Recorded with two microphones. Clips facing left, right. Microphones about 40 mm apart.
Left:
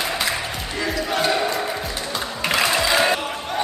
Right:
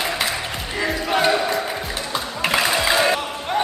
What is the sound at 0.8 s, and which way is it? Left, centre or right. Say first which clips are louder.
Crowd: right 3 dB; centre.